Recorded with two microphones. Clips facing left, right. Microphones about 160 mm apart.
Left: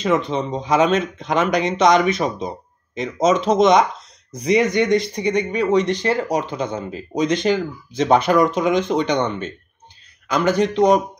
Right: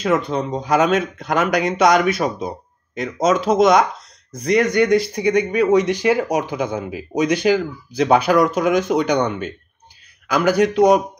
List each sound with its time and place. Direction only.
0.0 s speech: centre (ahead or behind)